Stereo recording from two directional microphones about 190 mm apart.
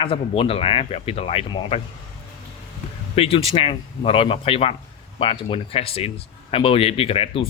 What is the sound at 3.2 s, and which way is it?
A man's voice, 30° left (ahead or behind).